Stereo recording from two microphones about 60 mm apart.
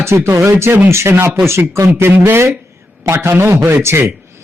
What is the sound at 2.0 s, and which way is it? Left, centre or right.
Speech, right.